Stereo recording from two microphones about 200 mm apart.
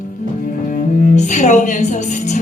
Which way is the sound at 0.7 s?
35° left (ahead or behind).